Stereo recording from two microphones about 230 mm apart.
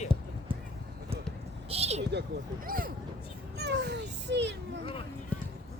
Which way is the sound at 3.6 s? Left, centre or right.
Right.